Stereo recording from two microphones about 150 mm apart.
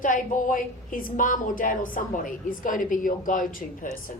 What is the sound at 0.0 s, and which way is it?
A woman's voice, 60° left (ahead or behind).